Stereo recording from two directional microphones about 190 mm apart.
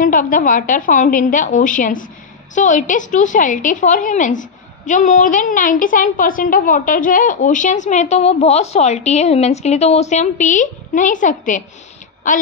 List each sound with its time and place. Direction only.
0.0 s a woman's voice: 45° left (ahead or behind)